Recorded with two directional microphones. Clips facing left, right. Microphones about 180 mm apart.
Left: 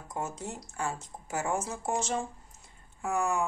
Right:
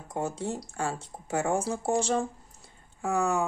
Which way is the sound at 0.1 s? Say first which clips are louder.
Right 5 dB; 30° right (ahead or behind).